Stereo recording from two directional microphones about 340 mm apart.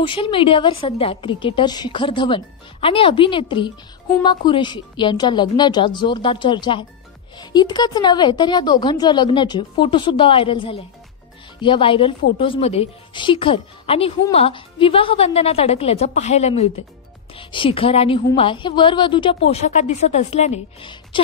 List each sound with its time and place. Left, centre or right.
0.0 s a woman's voice: centre